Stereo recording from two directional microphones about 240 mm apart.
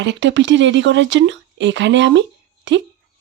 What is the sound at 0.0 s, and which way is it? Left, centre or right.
Speech, right.